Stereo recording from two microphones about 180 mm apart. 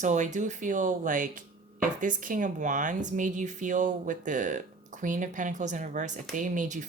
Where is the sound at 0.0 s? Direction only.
40° right (ahead or behind).